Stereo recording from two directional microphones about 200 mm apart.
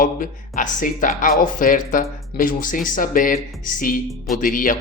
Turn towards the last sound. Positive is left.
turn(degrees=40)  # may be behind; listen again after turning